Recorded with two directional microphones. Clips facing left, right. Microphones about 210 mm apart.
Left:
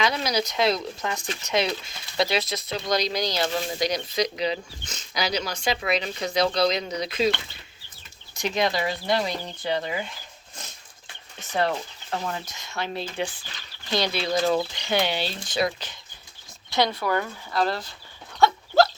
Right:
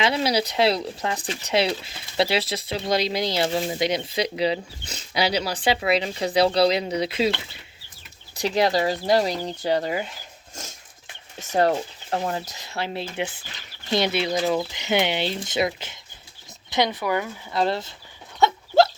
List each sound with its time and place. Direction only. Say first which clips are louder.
0.0 s speech: right 3 dB; 30° right (ahead or behind)
8.4 s speech: right 4 dB; 35° right (ahead or behind)
10.5 s a sound: right 5 dB; 45° right (ahead or behind)
12.1 s speech: right 4 dB; 35° right (ahead or behind)
12.9 s speech: right 1 dB; 20° right (ahead or behind)
17.5 s speech: right 2 dB; 25° right (ahead or behind)
18.3 s dog: right 1 dB; 20° right (ahead or behind)